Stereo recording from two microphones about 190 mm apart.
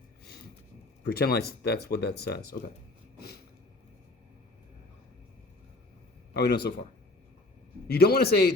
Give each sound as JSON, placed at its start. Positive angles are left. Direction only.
{"t": 1.0, "sound": "speech", "side_deg": 55}
{"t": 6.3, "sound": "speech", "side_deg": 55}
{"t": 7.9, "sound": "speech", "side_deg": 55}